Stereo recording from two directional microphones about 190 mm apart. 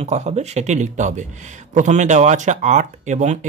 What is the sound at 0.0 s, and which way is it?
Speech, 35° right (ahead or behind).